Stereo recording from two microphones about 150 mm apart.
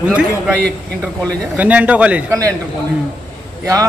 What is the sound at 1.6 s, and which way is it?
Speech, 10° right (ahead or behind).